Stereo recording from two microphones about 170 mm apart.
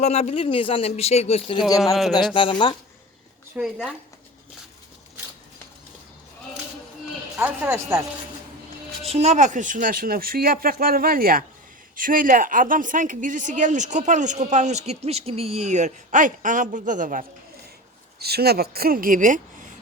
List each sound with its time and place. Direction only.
0.0 s speech: 40° left (ahead or behind)
3.5 s speech: 5° right (ahead or behind)
7.3 s speech: 10° right (ahead or behind)
9.0 s a woman's voice: 40° right (ahead or behind)
18.2 s speech: 70° right (ahead or behind); by 19.4 s 50° right (ahead or behind)